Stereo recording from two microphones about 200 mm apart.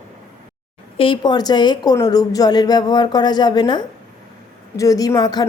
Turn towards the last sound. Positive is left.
turn(degrees=20)  # may be behind; listen again after turning